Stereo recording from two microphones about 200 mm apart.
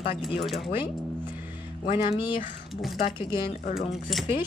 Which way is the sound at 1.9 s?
25° left (ahead or behind).